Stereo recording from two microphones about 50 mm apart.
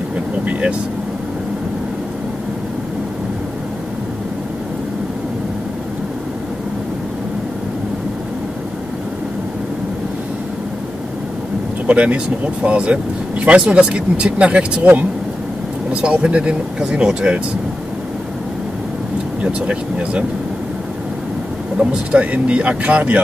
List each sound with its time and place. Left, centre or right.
0.5 s speech: right
11.9 s speech: right
15.9 s speech: right
19.4 s speech: right
21.7 s speech: right